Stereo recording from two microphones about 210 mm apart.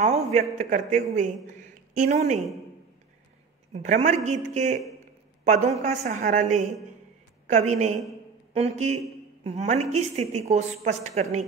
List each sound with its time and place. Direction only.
0.0 s a man's voice: 35° right (ahead or behind)
3.7 s a woman's voice: 35° right (ahead or behind)